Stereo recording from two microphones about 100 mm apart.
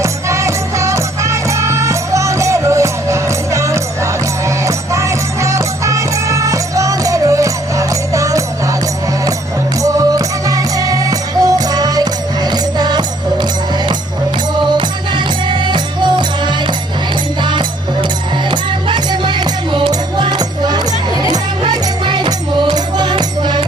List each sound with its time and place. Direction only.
0.0 s music: 30° right (ahead or behind)
9.8 s music: 35° right (ahead or behind)
15.4 s music: 50° right (ahead or behind)
18.5 s music: 50° right (ahead or behind)